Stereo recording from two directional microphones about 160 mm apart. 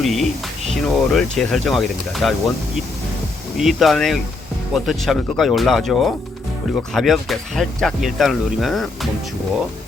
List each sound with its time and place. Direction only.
0.0 s speech: centre (ahead or behind)
3.6 s speech: centre (ahead or behind)